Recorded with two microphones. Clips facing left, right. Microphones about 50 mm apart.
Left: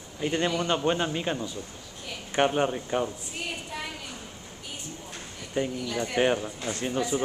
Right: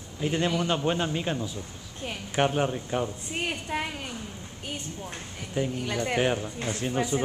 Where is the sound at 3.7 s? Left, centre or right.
Right.